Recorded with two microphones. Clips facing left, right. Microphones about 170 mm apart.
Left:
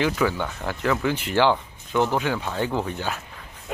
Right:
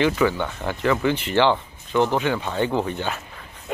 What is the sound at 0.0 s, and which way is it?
Speech, centre (ahead or behind).